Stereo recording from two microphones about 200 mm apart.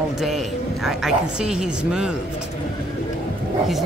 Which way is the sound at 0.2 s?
Centre (ahead or behind).